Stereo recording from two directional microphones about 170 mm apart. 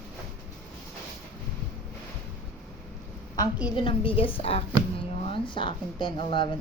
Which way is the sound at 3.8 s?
30° left (ahead or behind).